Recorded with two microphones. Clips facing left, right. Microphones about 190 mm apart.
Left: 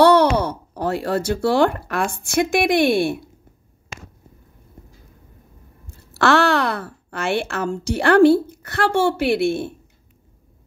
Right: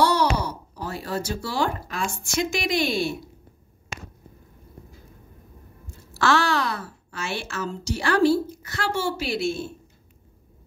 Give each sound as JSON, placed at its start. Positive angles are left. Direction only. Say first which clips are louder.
{"t": 0.0, "sound": "speech", "louder": "left 8 dB", "side_deg": 60}
{"t": 6.1, "sound": "a woman's voice", "louder": "left 5 dB", "side_deg": 65}